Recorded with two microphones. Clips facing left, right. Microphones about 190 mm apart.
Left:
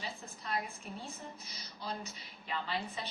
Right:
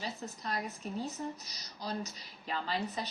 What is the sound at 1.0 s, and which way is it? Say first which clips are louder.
A woman's voice: right 7 dB; 40° right (ahead or behind).